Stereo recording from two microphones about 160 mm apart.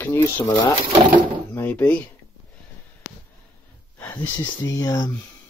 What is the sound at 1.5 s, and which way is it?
Speech, 10° left (ahead or behind).